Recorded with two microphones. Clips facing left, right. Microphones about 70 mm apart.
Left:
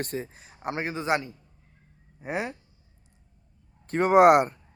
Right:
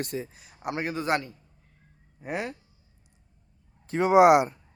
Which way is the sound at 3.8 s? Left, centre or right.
Left.